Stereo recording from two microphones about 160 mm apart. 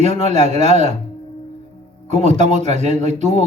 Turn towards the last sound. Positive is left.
turn(degrees=-45)  # may be behind; listen again after turning